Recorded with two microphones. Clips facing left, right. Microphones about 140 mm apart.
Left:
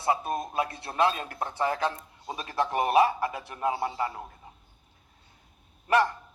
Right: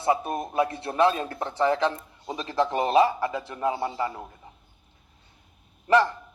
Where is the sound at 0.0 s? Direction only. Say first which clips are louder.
Right 3 dB; 25° right (ahead or behind).